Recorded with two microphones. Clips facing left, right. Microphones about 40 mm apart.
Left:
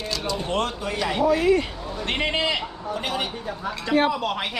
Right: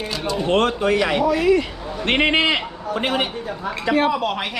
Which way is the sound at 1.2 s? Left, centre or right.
Right.